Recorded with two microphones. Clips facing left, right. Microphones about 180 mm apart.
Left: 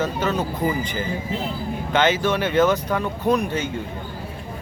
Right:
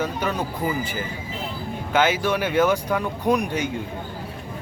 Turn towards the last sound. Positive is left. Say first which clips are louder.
# left 1 dB
turn(degrees=-15)  # may be behind; listen again after turning